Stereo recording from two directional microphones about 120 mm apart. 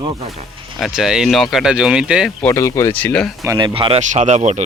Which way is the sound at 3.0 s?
10° left (ahead or behind).